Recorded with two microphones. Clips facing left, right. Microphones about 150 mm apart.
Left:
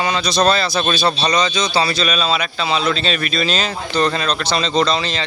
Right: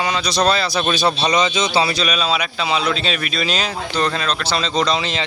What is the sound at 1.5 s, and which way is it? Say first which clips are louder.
Speech: even; 20° right (ahead or behind).